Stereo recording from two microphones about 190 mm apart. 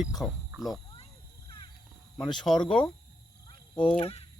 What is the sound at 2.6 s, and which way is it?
Speech, 5° left (ahead or behind).